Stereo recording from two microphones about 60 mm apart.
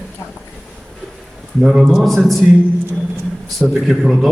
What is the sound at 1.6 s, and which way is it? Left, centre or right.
Speech, centre.